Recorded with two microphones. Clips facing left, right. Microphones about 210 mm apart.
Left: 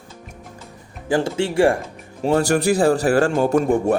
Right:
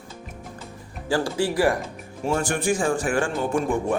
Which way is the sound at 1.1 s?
20° left (ahead or behind).